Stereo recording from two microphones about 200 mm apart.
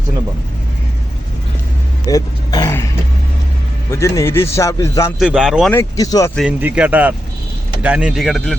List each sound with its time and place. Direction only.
2.0 s a sound: 20° left (ahead or behind)
3.9 s a man's voice: 15° left (ahead or behind)
5.2 s speech: 5° right (ahead or behind)
5.7 s a man's voice: 15° left (ahead or behind)
6.6 s speech: 10° right (ahead or behind)